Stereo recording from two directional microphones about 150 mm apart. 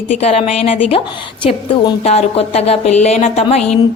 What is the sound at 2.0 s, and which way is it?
A woman's voice, 45° left (ahead or behind).